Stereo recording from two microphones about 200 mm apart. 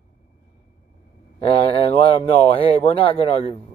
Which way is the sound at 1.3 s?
30° left (ahead or behind).